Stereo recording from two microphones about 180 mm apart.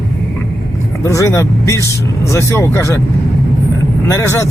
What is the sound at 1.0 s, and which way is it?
Speech, 15° left (ahead or behind).